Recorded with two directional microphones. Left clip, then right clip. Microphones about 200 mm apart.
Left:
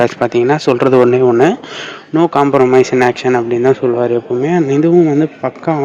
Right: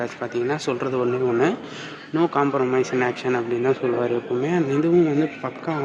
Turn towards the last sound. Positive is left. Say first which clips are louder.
# left 10 dB
turn(degrees=30)  # may be behind; listen again after turning